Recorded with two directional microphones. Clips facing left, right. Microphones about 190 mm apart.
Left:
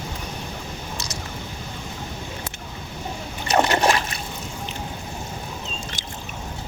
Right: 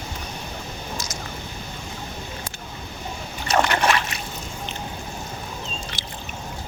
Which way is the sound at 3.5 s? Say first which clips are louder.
Left 1 dB; 30° left (ahead or behind).